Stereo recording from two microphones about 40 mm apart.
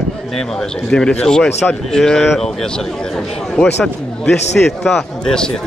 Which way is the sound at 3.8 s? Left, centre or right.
Centre.